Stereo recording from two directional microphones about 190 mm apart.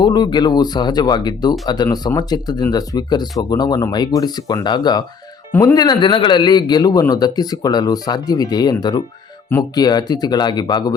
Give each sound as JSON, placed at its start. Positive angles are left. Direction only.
{"t": 0.0, "sound": "a man's voice", "side_deg": 25}